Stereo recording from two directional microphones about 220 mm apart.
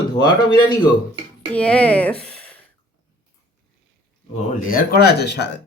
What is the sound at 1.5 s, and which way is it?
Speech, 5° left (ahead or behind).